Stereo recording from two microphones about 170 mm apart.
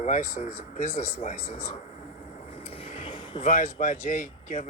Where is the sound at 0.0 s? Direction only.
45° left (ahead or behind).